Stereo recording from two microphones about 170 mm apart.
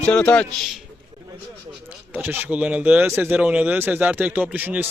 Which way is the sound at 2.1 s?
10° right (ahead or behind).